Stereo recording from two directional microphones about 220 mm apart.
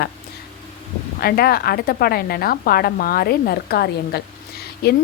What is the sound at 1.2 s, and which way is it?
Speech, 45° left (ahead or behind).